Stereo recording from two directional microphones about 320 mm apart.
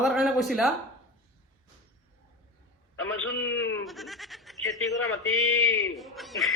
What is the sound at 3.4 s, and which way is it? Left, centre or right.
Bleat, left.